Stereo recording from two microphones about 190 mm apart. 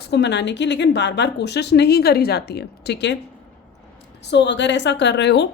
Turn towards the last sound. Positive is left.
turn(degrees=65)  # may be behind; listen again after turning